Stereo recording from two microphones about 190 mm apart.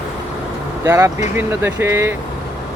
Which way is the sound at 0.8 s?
15° right (ahead or behind).